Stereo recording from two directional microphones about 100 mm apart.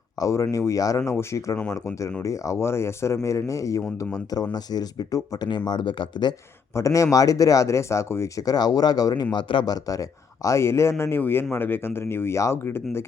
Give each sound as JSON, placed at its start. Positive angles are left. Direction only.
{"t": 0.2, "sound": "speech", "side_deg": 35}
{"t": 5.5, "sound": "speech", "side_deg": 50}
{"t": 6.7, "sound": "speech", "side_deg": 30}
{"t": 9.7, "sound": "speech", "side_deg": 35}